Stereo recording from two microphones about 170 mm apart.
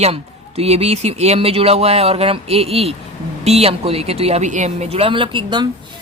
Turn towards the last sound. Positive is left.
turn(degrees=-30)  # may be behind; listen again after turning